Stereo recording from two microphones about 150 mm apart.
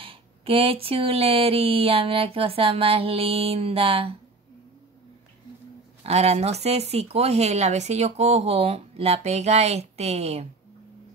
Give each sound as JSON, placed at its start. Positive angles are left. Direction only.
{"t": 0.0, "sound": "speech", "side_deg": -35}
{"t": 6.0, "sound": "speech", "side_deg": -45}